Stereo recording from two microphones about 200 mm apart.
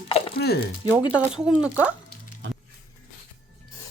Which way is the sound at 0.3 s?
55° left (ahead or behind).